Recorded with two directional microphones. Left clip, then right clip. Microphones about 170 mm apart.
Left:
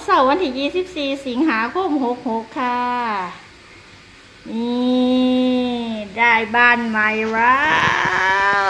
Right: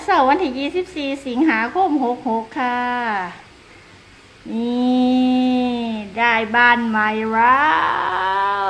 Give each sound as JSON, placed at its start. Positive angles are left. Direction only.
{"t": 0.2, "sound": "a woman's voice", "side_deg": -25}
{"t": 4.5, "sound": "mantra", "side_deg": -25}